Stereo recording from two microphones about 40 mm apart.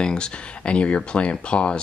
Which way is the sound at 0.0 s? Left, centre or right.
Centre.